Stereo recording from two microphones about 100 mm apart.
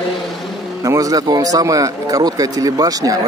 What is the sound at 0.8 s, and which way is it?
A man's voice, 35° right (ahead or behind).